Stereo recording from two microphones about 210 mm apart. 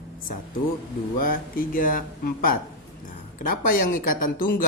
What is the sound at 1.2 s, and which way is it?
Speech, 45° left (ahead or behind).